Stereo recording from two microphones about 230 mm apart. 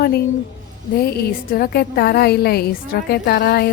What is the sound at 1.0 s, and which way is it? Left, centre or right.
A woman's voice, left.